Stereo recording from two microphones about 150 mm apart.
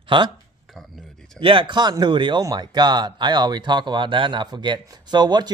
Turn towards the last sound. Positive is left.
turn(degrees=-30)  # may be behind; listen again after turning